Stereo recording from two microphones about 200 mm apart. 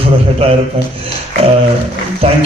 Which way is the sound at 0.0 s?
30° right (ahead or behind).